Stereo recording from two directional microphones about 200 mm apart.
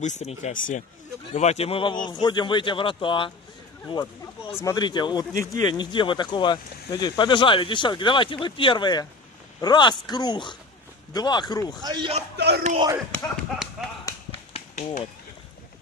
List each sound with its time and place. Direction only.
0.0 s speech: 35° left (ahead or behind)
3.8 s speech: 15° left (ahead or behind)
11.8 s speech: 25° right (ahead or behind)
12.4 s speech: 55° right (ahead or behind)
12.6 s speech: 30° right (ahead or behind)
13.1 s speech: centre (ahead or behind)